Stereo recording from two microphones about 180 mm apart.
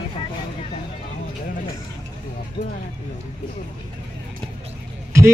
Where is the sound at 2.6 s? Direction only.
65° left (ahead or behind).